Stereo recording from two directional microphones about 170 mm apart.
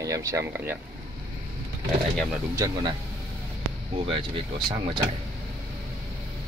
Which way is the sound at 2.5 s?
20° right (ahead or behind).